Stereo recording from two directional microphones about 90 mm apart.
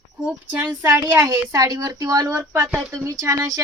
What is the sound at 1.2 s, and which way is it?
Speech, 40° right (ahead or behind).